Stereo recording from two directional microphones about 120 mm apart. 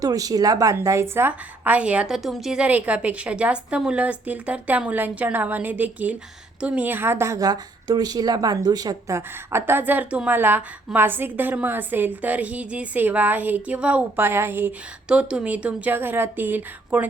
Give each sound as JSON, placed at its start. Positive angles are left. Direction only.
{"t": 0.0, "sound": "a woman's voice", "side_deg": -30}